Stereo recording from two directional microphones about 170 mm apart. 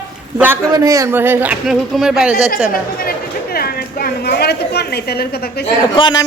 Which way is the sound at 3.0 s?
60° left (ahead or behind).